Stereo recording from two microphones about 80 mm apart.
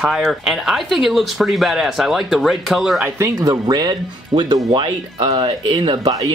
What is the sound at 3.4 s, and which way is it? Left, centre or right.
Speech, right.